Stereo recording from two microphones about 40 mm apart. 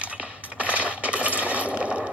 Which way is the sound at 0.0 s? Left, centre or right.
Right.